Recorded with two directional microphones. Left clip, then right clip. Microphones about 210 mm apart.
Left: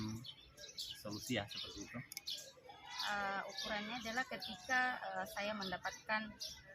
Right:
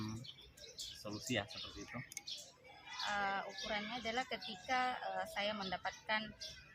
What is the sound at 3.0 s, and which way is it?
A woman's voice, 15° right (ahead or behind).